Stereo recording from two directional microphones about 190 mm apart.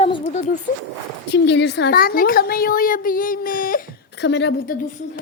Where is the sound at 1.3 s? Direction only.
65° left (ahead or behind); by 5.2 s 45° left (ahead or behind).